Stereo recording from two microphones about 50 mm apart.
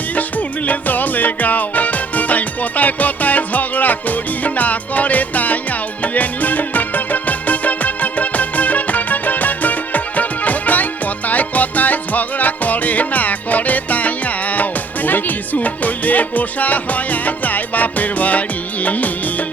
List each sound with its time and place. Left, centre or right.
0.2 s music: left